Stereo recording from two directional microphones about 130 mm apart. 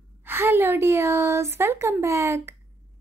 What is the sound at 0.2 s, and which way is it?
A woman's voice, 15° right (ahead or behind).